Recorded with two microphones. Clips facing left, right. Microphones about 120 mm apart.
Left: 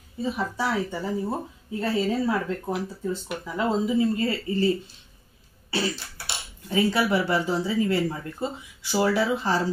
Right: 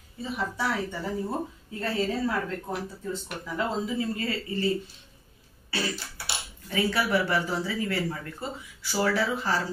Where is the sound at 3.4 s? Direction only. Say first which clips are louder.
Left 4 dB; 20° left (ahead or behind).